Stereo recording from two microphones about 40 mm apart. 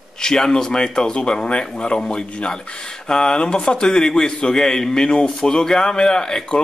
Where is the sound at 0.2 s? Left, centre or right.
Centre.